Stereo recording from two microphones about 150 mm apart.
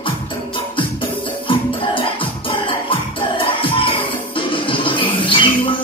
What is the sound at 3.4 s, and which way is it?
Music, 35° left (ahead or behind).